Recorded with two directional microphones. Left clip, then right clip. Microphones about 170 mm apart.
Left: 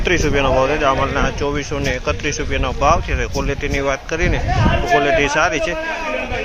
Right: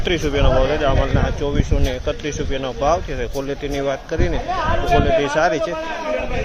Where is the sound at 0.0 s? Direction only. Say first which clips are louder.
Left 3 dB; centre (ahead or behind).